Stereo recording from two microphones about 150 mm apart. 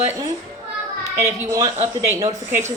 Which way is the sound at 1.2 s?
20° right (ahead or behind).